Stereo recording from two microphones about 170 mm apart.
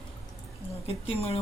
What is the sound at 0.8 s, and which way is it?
Speech, 35° left (ahead or behind).